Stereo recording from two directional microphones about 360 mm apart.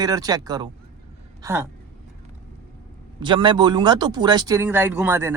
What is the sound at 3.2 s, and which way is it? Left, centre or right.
Speech, centre.